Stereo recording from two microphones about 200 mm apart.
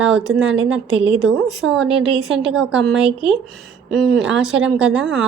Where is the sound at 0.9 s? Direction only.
30° right (ahead or behind).